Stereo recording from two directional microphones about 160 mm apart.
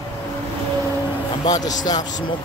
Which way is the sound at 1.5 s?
25° left (ahead or behind).